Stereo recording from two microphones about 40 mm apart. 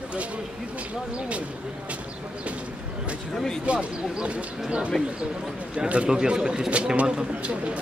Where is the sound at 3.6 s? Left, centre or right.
Right.